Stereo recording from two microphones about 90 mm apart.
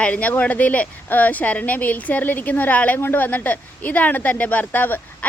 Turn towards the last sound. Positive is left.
turn(degrees=20)  # may be behind; listen again after turning